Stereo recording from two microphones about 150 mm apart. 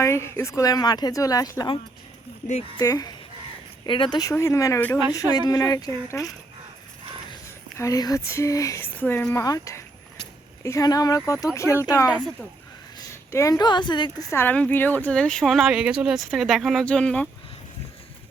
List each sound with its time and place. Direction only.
0.0 s a woman's voice: 20° left (ahead or behind)
2.7 s a woman's voice: 25° left (ahead or behind)
7.8 s a woman's voice: 25° left (ahead or behind)
12.1 s speech: centre (ahead or behind)
13.0 s a woman's voice: 20° left (ahead or behind); by 17.2 s 5° left (ahead or behind)